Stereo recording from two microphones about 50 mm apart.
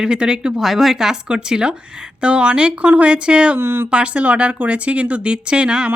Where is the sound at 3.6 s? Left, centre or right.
Right.